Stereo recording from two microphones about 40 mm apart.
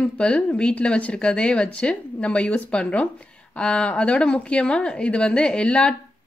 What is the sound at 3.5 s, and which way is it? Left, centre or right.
A woman's voice, left.